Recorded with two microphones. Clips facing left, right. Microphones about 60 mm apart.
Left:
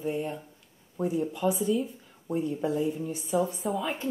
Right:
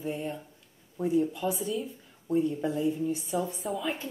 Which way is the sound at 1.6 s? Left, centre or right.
Centre.